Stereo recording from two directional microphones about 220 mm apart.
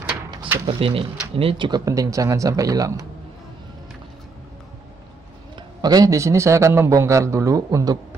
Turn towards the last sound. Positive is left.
turn(degrees=-15)  # may be behind; listen again after turning